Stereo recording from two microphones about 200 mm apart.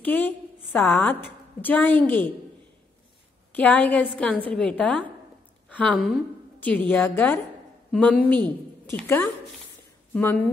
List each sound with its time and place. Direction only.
0.0 s a woman's voice: 5° left (ahead or behind)
3.5 s a woman's voice: 5° left (ahead or behind)